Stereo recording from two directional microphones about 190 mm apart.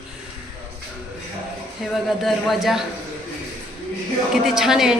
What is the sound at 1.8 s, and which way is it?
A woman's voice, centre (ahead or behind).